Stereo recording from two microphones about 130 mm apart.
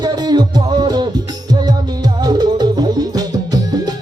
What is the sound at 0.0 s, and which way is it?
Music, 35° right (ahead or behind).